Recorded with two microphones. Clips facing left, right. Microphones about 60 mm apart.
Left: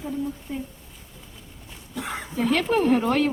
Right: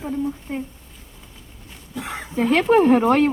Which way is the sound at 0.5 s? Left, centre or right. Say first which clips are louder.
Right 4 dB; right.